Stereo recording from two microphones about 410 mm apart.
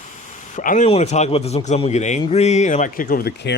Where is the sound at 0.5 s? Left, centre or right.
Centre.